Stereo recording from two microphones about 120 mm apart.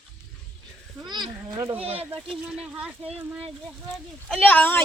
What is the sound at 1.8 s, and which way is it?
Speech, 55° right (ahead or behind).